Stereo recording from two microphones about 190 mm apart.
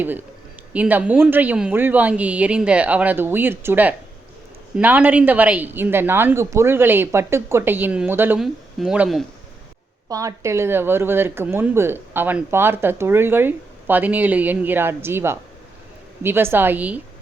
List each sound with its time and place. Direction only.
0.7 s speech: 10° right (ahead or behind)
10.1 s speech: 15° right (ahead or behind)